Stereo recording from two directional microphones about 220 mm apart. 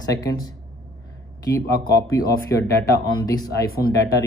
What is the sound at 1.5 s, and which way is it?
Speech, 15° left (ahead or behind).